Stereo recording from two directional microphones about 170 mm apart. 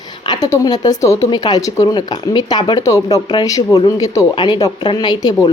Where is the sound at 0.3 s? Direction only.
20° left (ahead or behind).